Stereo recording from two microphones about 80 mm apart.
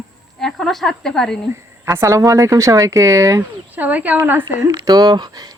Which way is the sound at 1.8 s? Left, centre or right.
Right.